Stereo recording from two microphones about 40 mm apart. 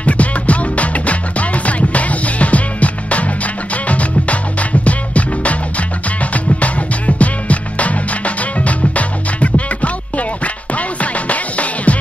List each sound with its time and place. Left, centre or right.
0.0 s music: left